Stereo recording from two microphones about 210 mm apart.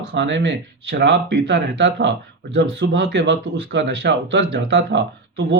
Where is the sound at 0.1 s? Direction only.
55° right (ahead or behind).